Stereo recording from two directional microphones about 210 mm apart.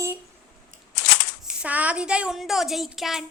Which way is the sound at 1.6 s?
5° right (ahead or behind).